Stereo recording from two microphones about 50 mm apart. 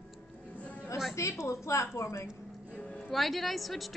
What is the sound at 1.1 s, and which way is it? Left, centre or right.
A woman's voice, left.